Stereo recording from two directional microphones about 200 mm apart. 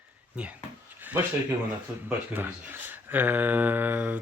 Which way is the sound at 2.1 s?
10° right (ahead or behind).